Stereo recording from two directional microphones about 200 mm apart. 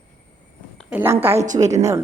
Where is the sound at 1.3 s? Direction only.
35° right (ahead or behind).